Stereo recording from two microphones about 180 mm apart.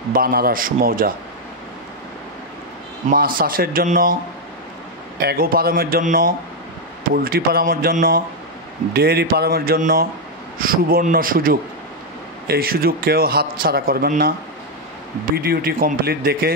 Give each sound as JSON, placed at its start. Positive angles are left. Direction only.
{"t": 0.1, "sound": "a man's voice", "side_deg": -55}
{"t": 3.1, "sound": "a man's voice", "side_deg": -50}
{"t": 5.2, "sound": "a man's voice", "side_deg": -55}
{"t": 15.3, "sound": "a man's voice", "side_deg": -55}